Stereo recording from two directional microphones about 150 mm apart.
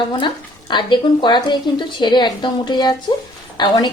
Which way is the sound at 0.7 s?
30° left (ahead or behind).